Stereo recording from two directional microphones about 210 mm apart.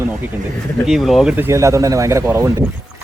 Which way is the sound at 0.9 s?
Centre (ahead or behind).